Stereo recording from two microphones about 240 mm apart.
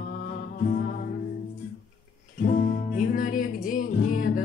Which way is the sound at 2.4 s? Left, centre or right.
Left.